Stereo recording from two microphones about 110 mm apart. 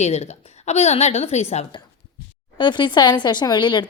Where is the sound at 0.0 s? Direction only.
90° left.